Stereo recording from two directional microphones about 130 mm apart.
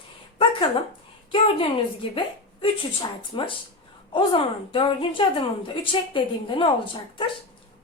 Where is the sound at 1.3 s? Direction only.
40° left (ahead or behind).